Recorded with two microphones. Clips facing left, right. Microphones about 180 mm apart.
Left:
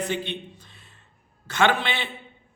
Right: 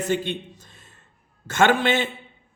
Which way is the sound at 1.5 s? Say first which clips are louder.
Right 4 dB; 45° right (ahead or behind).